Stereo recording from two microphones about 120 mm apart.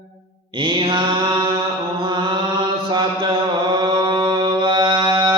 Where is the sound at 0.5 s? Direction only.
45° right (ahead or behind).